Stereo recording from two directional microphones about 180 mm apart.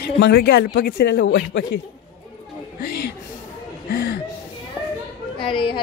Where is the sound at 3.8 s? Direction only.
65° left (ahead or behind).